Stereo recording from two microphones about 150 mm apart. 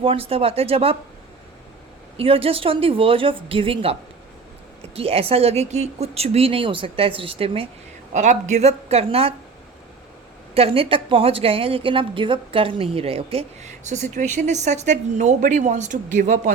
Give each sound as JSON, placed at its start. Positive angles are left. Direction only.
{"t": 0.0, "sound": "a woman's voice", "side_deg": -40}
{"t": 2.1, "sound": "a woman's voice", "side_deg": -40}
{"t": 4.9, "sound": "a woman's voice", "side_deg": -40}
{"t": 8.1, "sound": "speech", "side_deg": -55}
{"t": 10.5, "sound": "a woman's voice", "side_deg": -40}